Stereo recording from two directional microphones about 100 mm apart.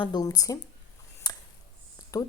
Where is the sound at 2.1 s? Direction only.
35° left (ahead or behind).